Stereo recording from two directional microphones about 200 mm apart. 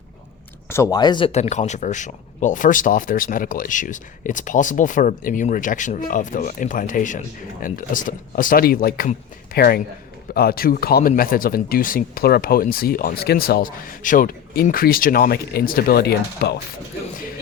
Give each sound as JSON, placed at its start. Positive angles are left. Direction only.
{"t": 0.7, "sound": "speech", "side_deg": 15}